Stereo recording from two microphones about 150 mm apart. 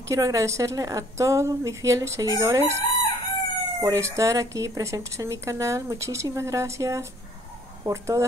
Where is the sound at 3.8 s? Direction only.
20° right (ahead or behind).